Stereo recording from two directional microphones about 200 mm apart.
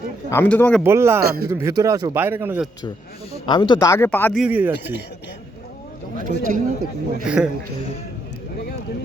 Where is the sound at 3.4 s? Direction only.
25° left (ahead or behind).